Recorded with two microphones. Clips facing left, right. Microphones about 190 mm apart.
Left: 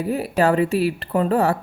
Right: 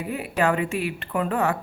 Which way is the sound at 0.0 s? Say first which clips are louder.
Left 5 dB; 40° left (ahead or behind).